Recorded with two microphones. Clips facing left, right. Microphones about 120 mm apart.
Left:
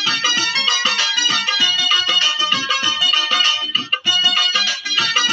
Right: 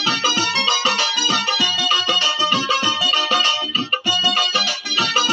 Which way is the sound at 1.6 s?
55° right (ahead or behind).